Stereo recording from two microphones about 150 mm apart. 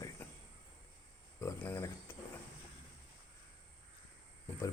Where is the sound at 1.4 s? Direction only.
20° left (ahead or behind).